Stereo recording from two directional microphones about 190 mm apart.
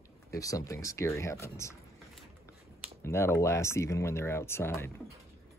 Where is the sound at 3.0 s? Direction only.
15° left (ahead or behind).